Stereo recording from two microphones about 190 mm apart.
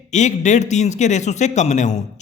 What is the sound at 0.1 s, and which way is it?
A man's voice, 40° left (ahead or behind).